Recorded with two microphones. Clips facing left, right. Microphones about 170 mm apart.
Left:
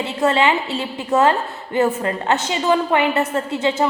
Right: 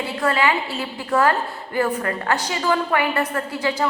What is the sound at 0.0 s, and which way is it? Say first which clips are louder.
A woman's voice: left 3 dB; 25° left (ahead or behind).